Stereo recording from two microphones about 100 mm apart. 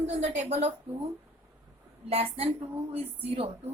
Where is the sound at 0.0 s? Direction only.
90° right.